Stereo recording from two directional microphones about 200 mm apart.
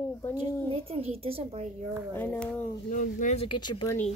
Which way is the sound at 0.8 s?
30° right (ahead or behind).